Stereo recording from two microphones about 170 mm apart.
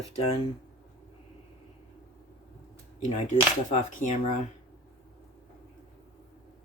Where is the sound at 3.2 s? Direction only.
45° left (ahead or behind).